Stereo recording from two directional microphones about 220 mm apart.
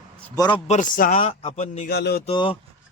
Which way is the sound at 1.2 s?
25° left (ahead or behind).